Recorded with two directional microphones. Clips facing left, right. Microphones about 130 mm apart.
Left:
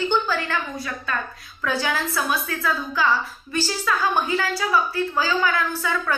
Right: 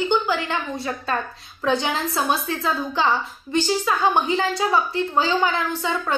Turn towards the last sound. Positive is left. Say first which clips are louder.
# right 1 dB
turn(degrees=-25)  # may be behind; listen again after turning